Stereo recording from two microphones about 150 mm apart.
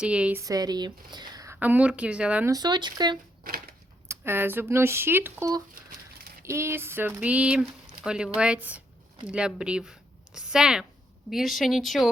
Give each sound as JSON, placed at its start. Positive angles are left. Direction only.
{"t": 0.0, "sound": "speech", "side_deg": -5}
{"t": 0.4, "sound": "speech", "side_deg": -25}
{"t": 1.5, "sound": "speech", "side_deg": -10}
{"t": 2.5, "sound": "speech", "side_deg": -30}
{"t": 3.4, "sound": "a sound", "side_deg": -75}
{"t": 4.1, "sound": "speech", "side_deg": -15}